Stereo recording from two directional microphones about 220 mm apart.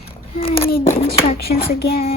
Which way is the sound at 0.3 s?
25° left (ahead or behind).